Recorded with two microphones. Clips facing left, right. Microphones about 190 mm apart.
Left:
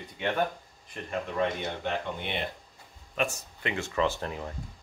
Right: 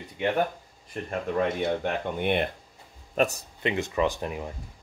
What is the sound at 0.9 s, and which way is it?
Speech, 45° right (ahead or behind).